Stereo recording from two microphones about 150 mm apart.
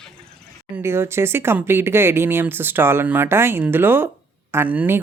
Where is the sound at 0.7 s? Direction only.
15° right (ahead or behind).